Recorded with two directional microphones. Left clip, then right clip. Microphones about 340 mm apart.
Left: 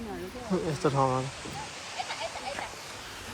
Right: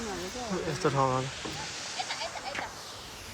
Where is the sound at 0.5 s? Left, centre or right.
Centre.